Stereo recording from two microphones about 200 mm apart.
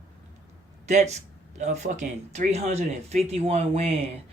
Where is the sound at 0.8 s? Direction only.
35° right (ahead or behind).